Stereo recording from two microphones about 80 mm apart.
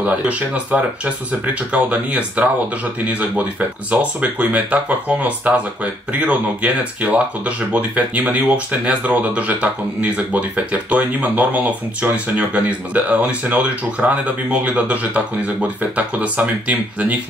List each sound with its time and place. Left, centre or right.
0.0 s speech: centre